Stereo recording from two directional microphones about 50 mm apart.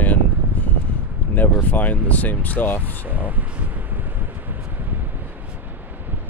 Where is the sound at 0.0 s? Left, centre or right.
Left.